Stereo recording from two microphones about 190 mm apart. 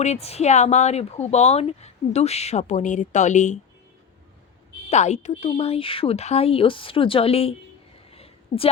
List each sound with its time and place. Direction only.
0.0 s a woman's voice: 35° left (ahead or behind)
4.9 s a woman's voice: 35° left (ahead or behind)
8.1 s a sound: 30° left (ahead or behind)